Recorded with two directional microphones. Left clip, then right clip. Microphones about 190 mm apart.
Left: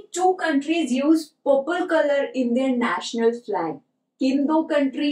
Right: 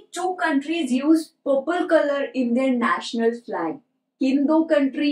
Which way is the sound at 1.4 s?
5° left (ahead or behind).